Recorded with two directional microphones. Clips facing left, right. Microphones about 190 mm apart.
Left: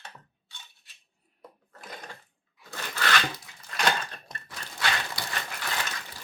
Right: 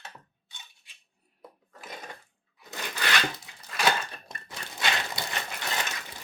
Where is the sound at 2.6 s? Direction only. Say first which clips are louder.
Left 1 dB; 15° right (ahead or behind).